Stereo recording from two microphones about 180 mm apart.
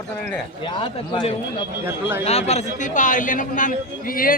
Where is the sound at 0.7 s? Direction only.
25° left (ahead or behind).